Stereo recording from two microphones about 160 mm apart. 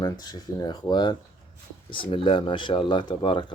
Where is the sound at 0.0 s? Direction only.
25° left (ahead or behind).